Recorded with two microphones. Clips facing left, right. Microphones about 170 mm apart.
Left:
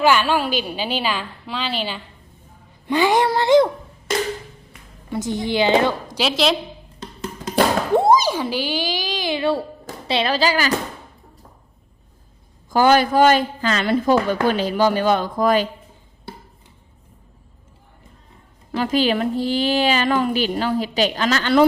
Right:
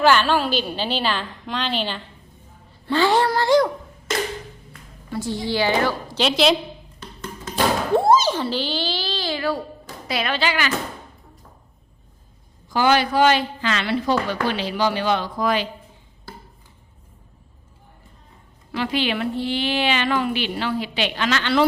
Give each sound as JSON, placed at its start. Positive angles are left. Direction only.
{"t": 0.0, "sound": "a woman's voice", "side_deg": 10}
{"t": 4.7, "sound": "a woman's voice", "side_deg": 20}
{"t": 6.1, "sound": "a woman's voice", "side_deg": 0}
{"t": 7.9, "sound": "a child's voice", "side_deg": 15}
{"t": 12.7, "sound": "a woman's voice", "side_deg": 45}
{"t": 18.7, "sound": "a woman's voice", "side_deg": 40}